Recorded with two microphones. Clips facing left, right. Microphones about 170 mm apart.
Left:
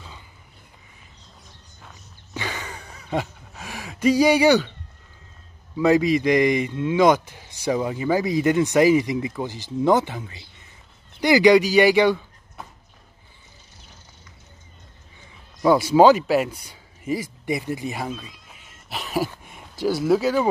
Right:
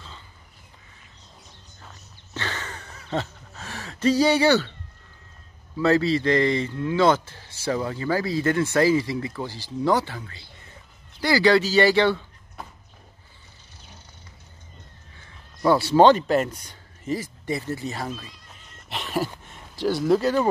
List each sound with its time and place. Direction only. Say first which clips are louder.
2.3 s a sound: left 1 dB; 10° left (ahead or behind)
5.8 s a man's voice: left 2 dB; 15° left (ahead or behind)
15.6 s a man's voice: left 2 dB; 10° left (ahead or behind)
18.1 s cat: left 2 dB; 5° left (ahead or behind)
19.8 s speech: left 1 dB; 5° left (ahead or behind)